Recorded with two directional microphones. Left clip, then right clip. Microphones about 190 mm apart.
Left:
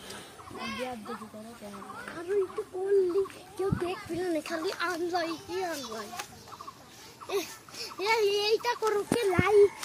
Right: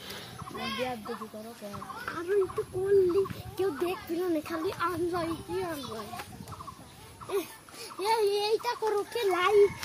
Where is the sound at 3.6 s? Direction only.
50° right (ahead or behind).